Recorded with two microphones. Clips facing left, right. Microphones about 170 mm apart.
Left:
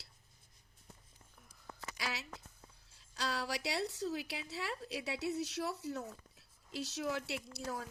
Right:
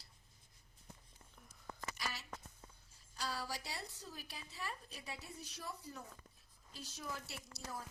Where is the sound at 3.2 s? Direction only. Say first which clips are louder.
Left 5 dB; 75° left (ahead or behind).